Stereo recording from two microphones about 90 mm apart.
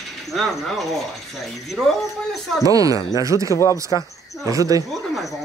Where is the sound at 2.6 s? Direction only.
40° right (ahead or behind).